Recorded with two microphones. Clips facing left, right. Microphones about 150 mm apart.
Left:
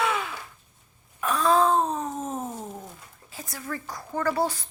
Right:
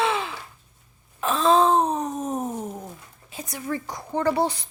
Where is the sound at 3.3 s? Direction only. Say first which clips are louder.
Right 5 dB; 20° right (ahead or behind).